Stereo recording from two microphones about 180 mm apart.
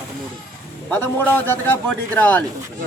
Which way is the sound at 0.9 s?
10° left (ahead or behind).